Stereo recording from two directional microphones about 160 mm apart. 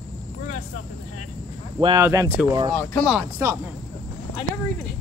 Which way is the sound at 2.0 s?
15° right (ahead or behind).